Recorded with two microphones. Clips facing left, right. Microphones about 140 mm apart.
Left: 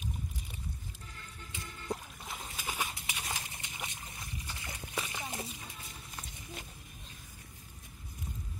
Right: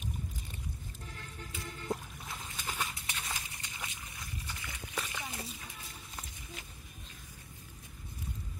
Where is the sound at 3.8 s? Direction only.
25° left (ahead or behind).